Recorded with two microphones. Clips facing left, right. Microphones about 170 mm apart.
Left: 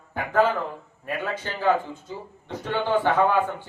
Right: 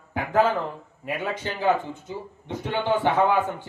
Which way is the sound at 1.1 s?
15° right (ahead or behind).